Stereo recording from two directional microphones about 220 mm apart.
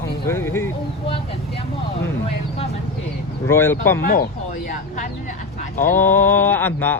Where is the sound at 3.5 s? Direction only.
10° left (ahead or behind).